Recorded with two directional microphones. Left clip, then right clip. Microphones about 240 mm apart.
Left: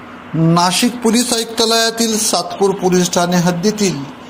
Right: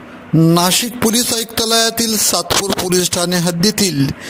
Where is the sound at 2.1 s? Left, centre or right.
Right.